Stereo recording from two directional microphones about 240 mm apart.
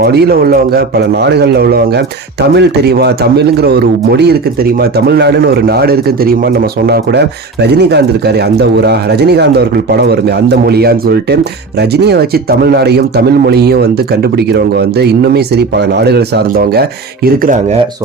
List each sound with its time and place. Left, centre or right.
0.0 s a man's voice: right